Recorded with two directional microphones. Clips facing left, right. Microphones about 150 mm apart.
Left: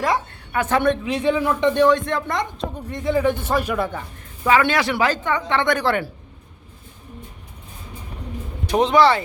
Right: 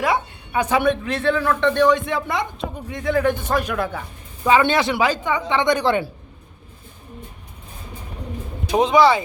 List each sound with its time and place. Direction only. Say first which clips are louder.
0.0 s a sound: right 1 dB; 10° right (ahead or behind)
1.0 s speech: even; 10° left (ahead or behind)
4.4 s speech: right 1 dB; 25° right (ahead or behind)
8.6 s speech: right 1 dB; 10° right (ahead or behind)